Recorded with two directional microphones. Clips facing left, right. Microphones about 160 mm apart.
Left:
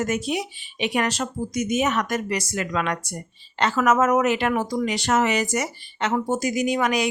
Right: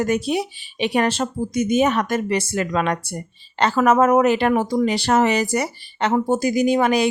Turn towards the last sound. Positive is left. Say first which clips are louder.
# right 5 dB
turn(degrees=-30)  # may be behind; listen again after turning